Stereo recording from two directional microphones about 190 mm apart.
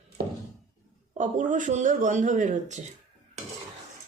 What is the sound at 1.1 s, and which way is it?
A woman's voice, 40° right (ahead or behind).